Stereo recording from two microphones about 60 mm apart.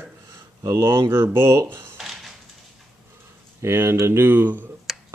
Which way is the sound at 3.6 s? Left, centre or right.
Right.